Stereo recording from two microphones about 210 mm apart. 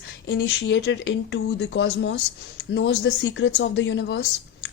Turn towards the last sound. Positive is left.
turn(degrees=55)  # may be behind; listen again after turning